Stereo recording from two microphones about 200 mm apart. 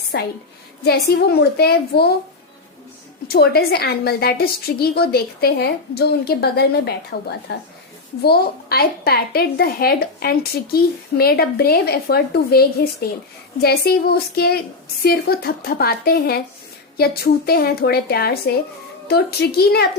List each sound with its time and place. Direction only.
0.1 s a woman's voice: 55° left (ahead or behind)
3.2 s a woman's voice: 50° left (ahead or behind)